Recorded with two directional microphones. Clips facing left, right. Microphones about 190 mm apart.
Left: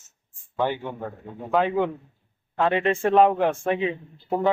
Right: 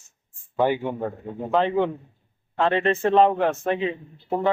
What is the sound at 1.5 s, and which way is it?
A man's voice, 5° left (ahead or behind).